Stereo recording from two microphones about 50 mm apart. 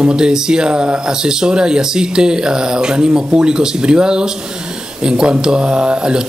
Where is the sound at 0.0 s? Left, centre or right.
Centre.